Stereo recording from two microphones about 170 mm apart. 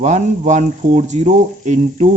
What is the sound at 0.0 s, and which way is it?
Speech, 45° right (ahead or behind).